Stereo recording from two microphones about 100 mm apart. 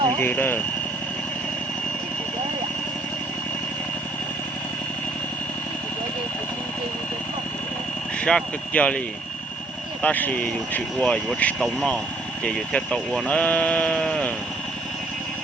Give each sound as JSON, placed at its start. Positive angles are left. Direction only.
{"t": 0.2, "sound": "speech", "side_deg": 20}
{"t": 8.2, "sound": "speech", "side_deg": 10}
{"t": 10.0, "sound": "speech", "side_deg": 15}